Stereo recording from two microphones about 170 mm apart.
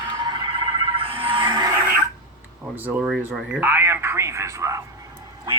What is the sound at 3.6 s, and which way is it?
Speech, 10° right (ahead or behind).